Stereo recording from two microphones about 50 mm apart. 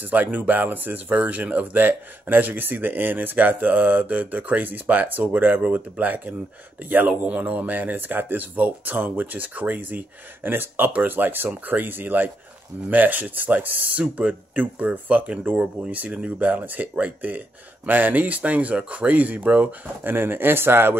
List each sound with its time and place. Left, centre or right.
0.0 s speech: right